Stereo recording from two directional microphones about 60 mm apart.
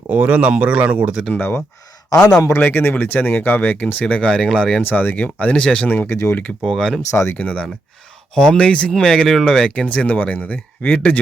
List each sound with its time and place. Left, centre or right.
0.1 s speech: right
1.4 s speech: left
4.0 s speech: centre
4.8 s speech: left
6.1 s speech: left
6.7 s speech: centre
7.1 s speech: left
7.3 s speech: left